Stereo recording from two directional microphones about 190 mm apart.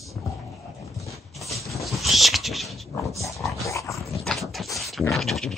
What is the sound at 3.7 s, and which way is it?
Dog, 15° left (ahead or behind).